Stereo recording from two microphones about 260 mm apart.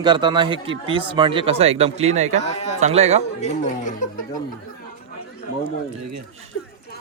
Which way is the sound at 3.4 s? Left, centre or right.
Left.